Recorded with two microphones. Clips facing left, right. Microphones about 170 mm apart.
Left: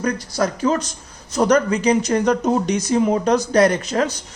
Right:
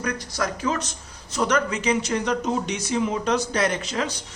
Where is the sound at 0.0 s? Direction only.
35° left (ahead or behind).